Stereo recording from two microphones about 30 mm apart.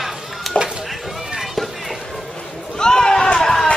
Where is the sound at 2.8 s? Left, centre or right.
Left.